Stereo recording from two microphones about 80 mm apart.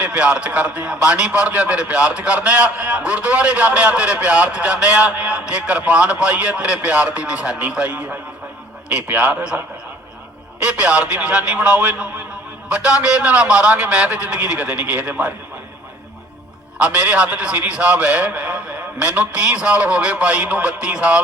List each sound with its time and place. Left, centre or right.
0.0 s a man's voice: centre
10.6 s a man's voice: centre
16.7 s a man's voice: centre